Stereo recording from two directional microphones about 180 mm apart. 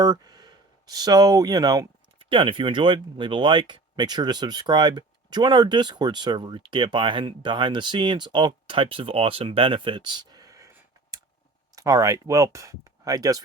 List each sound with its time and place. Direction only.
0.0 s speech: 20° right (ahead or behind)